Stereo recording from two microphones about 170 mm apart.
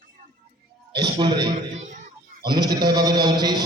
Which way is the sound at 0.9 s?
25° right (ahead or behind).